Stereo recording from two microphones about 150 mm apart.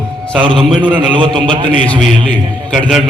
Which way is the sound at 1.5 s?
30° right (ahead or behind).